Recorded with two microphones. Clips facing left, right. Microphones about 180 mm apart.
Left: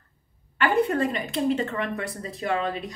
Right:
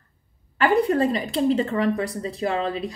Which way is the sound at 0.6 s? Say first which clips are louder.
Right 3 dB; 35° right (ahead or behind).